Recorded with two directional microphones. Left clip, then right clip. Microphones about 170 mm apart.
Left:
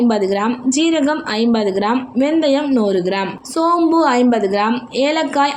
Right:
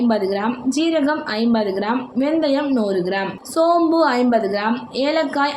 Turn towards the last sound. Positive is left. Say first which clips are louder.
# left 3 dB
turn(degrees=20)  # may be behind; listen again after turning